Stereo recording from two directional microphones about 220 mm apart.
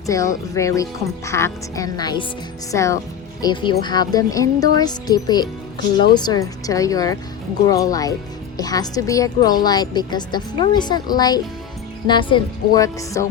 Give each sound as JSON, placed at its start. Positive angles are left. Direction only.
{"t": 0.1, "sound": "speech", "side_deg": 15}